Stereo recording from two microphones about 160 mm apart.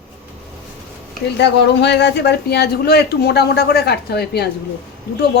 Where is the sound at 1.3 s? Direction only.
90° left.